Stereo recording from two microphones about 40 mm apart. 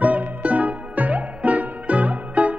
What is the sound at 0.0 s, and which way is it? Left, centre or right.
Music, right.